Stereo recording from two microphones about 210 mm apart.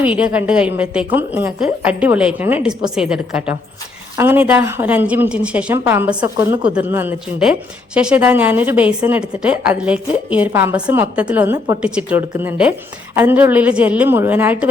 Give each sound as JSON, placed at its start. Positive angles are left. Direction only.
{"t": 0.0, "sound": "a woman's voice", "side_deg": -5}